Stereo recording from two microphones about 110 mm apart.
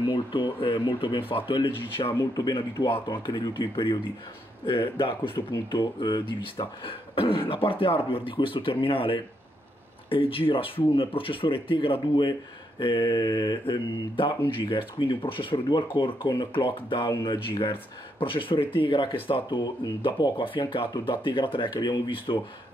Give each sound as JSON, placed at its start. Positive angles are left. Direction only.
{"t": 0.0, "sound": "speech", "side_deg": 45}
{"t": 2.1, "sound": "speech", "side_deg": 35}